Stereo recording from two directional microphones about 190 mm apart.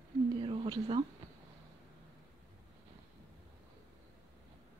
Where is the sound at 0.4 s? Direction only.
30° right (ahead or behind).